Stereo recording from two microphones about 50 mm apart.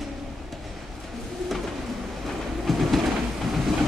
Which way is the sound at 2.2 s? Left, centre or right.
Centre.